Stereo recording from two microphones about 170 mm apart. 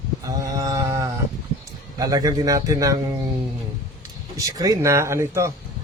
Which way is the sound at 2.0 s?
20° right (ahead or behind).